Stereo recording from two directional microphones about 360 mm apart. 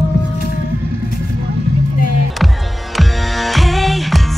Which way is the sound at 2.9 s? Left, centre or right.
Centre.